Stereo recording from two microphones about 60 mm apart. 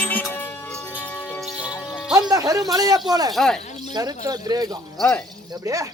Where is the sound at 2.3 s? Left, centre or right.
Right.